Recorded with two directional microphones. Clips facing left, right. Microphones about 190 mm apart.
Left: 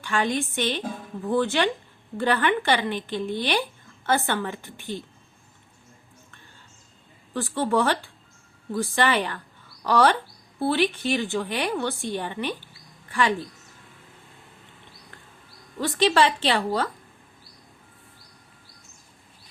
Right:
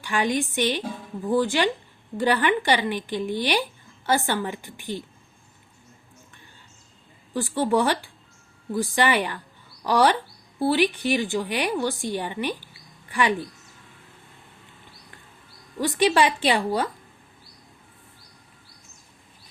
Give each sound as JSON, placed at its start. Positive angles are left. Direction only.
{"t": 0.0, "sound": "speech", "side_deg": -15}
{"t": 7.3, "sound": "speech", "side_deg": -15}
{"t": 15.8, "sound": "speech", "side_deg": -15}